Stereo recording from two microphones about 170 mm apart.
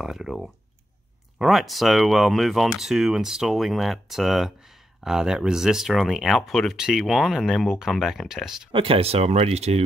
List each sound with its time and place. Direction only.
0.0 s speech: centre (ahead or behind)
8.7 s speech: 35° right (ahead or behind)